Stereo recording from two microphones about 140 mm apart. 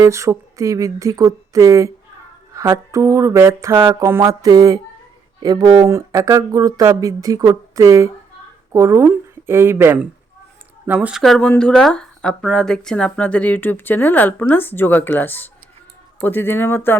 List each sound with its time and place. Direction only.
0.0 s speech: 20° right (ahead or behind)
11.2 s speech: 5° left (ahead or behind)